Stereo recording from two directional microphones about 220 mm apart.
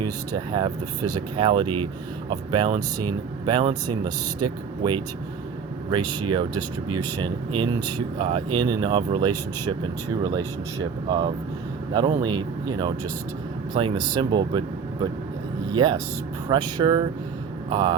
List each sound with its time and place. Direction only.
0.0 s speech: 20° right (ahead or behind)
11.9 s speech: 20° right (ahead or behind)
15.7 s speech: 20° right (ahead or behind)